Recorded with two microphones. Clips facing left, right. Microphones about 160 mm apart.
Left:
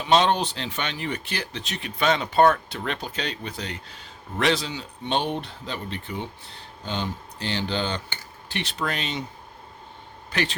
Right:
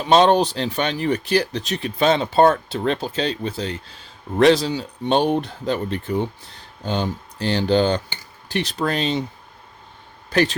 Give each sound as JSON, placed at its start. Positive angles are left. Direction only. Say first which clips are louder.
{"t": 0.0, "sound": "speech", "louder": "right 6 dB", "side_deg": -40}
{"t": 10.3, "sound": "speech", "louder": "right 8 dB", "side_deg": -40}